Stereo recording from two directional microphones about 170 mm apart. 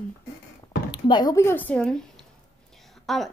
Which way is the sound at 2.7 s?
Centre (ahead or behind).